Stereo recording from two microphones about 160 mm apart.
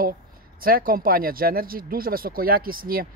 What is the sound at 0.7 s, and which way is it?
Speech, 65° right (ahead or behind).